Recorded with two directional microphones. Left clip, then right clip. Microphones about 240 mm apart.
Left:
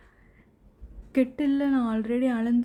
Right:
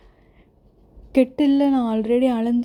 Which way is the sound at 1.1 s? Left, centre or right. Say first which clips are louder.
Right 8 dB; centre.